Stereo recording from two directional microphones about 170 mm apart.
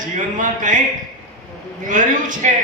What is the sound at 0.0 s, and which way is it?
Speech, 50° right (ahead or behind).